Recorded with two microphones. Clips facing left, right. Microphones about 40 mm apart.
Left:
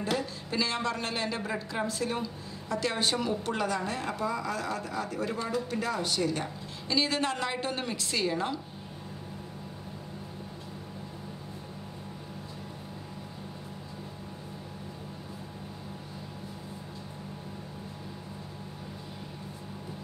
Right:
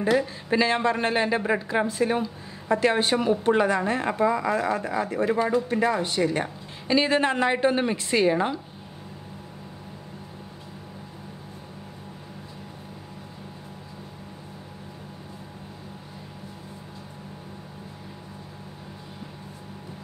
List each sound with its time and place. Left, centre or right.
0.5 s speech: right